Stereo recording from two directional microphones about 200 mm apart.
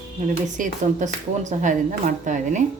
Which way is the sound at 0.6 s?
40° right (ahead or behind).